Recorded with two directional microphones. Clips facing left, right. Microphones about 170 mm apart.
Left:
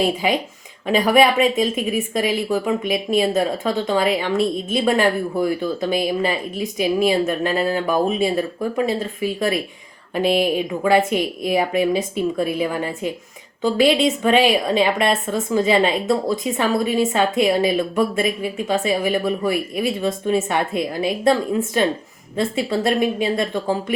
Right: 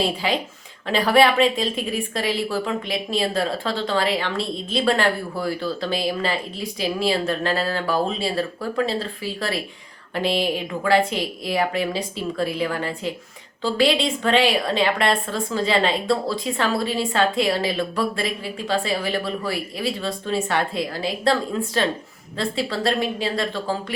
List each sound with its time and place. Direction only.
0.9 s speech: 20° left (ahead or behind)